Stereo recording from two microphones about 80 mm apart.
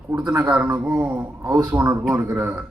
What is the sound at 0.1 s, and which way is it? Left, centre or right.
A man's voice, centre.